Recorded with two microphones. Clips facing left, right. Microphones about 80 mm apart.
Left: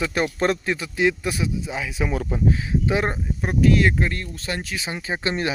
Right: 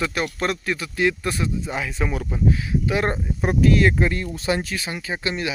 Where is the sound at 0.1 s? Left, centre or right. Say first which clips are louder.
Left 3 dB; left; by 2.1 s centre.